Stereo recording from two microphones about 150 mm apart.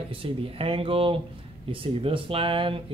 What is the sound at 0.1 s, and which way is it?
Speech, 35° right (ahead or behind).